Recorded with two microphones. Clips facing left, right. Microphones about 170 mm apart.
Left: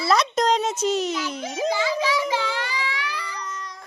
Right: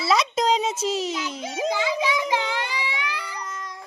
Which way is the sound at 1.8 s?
15° right (ahead or behind).